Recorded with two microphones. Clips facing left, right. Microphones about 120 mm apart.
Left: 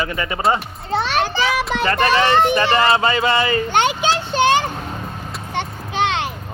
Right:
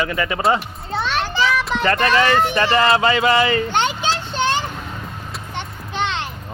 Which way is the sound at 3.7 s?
60° left (ahead or behind).